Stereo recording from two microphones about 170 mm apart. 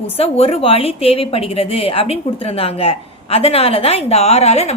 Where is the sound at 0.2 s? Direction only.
35° left (ahead or behind).